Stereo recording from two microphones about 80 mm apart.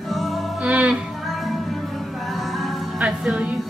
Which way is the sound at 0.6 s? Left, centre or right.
Centre.